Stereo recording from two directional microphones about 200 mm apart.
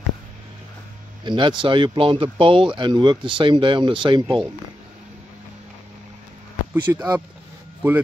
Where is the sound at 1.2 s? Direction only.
25° right (ahead or behind).